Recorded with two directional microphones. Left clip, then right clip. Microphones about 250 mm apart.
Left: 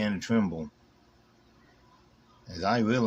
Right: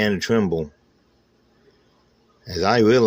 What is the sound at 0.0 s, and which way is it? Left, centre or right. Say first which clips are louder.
Speech: right 9 dB; right.